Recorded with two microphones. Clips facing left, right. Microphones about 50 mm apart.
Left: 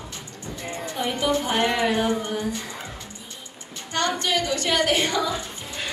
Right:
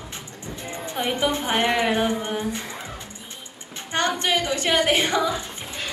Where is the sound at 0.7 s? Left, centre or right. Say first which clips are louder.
Right 1 dB; right.